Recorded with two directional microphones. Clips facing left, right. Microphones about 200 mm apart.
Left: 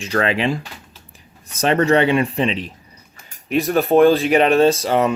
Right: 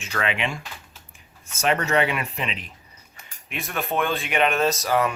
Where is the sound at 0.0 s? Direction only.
35° left (ahead or behind).